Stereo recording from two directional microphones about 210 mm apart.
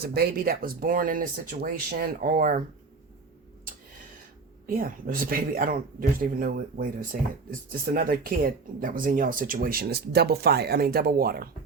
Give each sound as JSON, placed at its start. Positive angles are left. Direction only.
{"t": 0.0, "sound": "speech", "side_deg": -50}
{"t": 4.6, "sound": "speech", "side_deg": -45}